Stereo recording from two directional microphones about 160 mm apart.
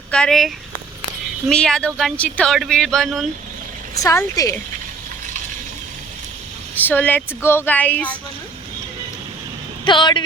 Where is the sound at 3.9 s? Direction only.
20° left (ahead or behind).